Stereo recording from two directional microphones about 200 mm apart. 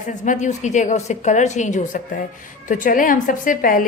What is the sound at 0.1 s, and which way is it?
A woman's voice, 40° left (ahead or behind).